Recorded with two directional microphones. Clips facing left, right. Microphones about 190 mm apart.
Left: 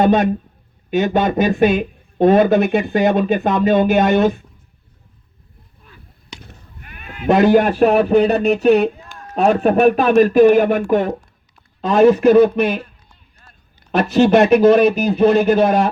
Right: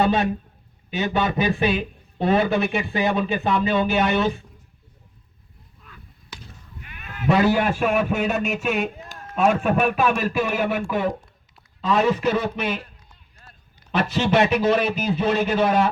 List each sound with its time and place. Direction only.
0.0 s speech: 45° left (ahead or behind)
6.4 s chop: 50° left (ahead or behind)
7.3 s a man's voice: 45° left (ahead or behind)
13.9 s speech: 45° left (ahead or behind)